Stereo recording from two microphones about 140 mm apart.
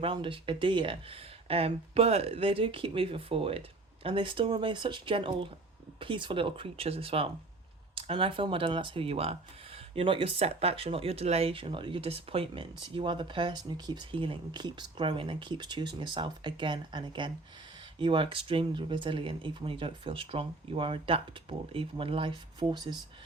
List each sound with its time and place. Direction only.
0.0 s speech: 35° right (ahead or behind)